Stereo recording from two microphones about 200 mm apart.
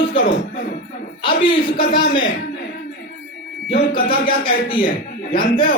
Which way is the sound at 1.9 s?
60° left (ahead or behind).